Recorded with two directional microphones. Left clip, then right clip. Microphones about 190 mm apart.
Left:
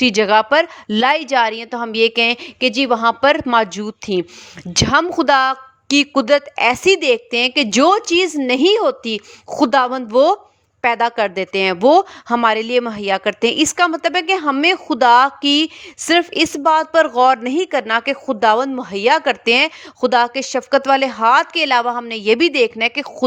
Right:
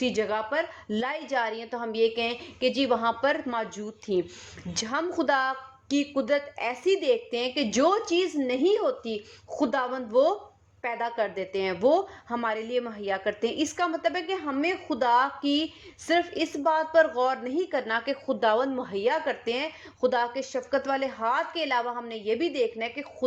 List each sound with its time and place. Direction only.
0.0 s a woman's voice: 45° left (ahead or behind)